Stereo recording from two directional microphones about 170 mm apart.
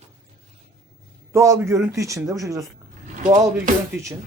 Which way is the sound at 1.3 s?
15° right (ahead or behind).